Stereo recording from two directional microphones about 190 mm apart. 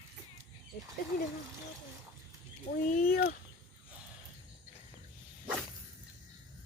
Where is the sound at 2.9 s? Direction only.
55° left (ahead or behind).